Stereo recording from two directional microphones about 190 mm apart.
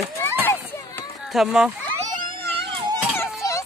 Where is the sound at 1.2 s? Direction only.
Centre (ahead or behind).